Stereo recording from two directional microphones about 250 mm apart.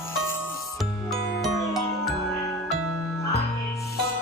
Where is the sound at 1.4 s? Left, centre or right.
Centre.